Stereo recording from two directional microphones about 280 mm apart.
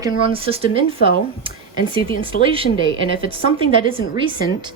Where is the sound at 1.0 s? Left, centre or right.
Left.